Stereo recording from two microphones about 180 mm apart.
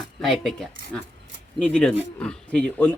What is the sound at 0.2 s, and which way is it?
Speech, centre (ahead or behind).